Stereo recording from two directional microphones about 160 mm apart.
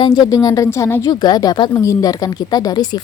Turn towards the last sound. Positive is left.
turn(degrees=25)  # may be behind; listen again after turning